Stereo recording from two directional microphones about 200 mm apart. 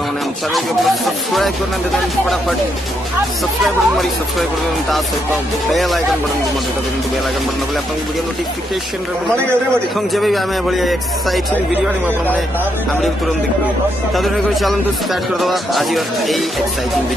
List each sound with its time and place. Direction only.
0.5 s a man's voice: centre (ahead or behind)
3.6 s a man's voice: centre (ahead or behind)
9.9 s a man's voice: centre (ahead or behind)
14.1 s a man's voice: centre (ahead or behind)